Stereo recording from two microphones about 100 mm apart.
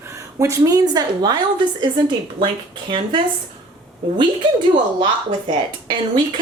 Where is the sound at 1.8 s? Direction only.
50° right (ahead or behind).